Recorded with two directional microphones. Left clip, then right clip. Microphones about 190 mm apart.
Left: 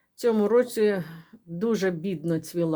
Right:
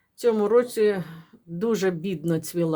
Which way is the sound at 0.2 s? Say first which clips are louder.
Right 1 dB; 5° left (ahead or behind).